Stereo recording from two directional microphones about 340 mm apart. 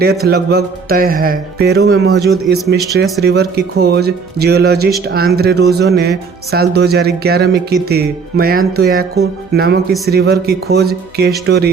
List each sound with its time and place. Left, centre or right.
0.3 s speech: right